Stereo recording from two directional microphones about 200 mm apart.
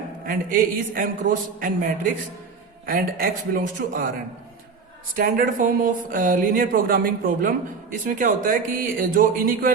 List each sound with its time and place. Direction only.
0.3 s speech: 45° right (ahead or behind)
5.1 s speech: 45° right (ahead or behind)